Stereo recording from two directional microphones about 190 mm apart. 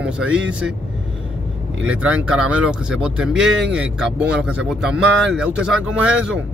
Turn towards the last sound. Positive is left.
turn(degrees=-5)  # may be behind; listen again after turning